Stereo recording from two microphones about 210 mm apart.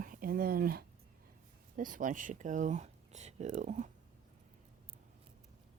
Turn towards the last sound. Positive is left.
turn(degrees=-35)  # may be behind; listen again after turning